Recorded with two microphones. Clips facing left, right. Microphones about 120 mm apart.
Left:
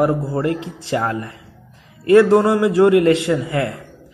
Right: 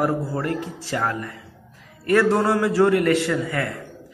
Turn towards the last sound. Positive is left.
turn(degrees=20)  # may be behind; listen again after turning